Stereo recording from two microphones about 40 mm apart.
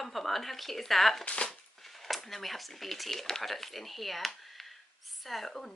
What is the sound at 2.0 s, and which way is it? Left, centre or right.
Speech, centre.